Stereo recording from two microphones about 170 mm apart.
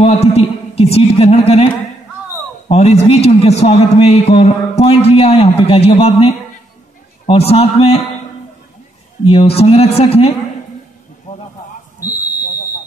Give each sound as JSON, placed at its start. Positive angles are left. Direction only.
{"t": 0.0, "sound": "a man's voice", "side_deg": 35}
{"t": 2.7, "sound": "a man's voice", "side_deg": 40}
{"t": 9.2, "sound": "a man's voice", "side_deg": 35}
{"t": 11.3, "sound": "a sound", "side_deg": 50}